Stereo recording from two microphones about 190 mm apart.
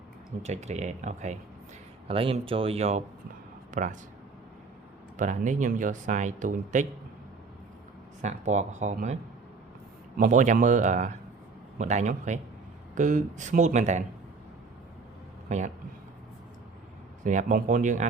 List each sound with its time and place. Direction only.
0.4 s speech: 35° right (ahead or behind)
5.1 s speech: 40° right (ahead or behind)
8.2 s speech: 40° right (ahead or behind)
10.2 s speech: 40° right (ahead or behind)
15.4 s speech: 40° right (ahead or behind)
17.2 s speech: 40° right (ahead or behind)